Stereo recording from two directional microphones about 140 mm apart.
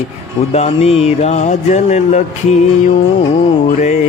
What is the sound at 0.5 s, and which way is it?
Music, 50° left (ahead or behind).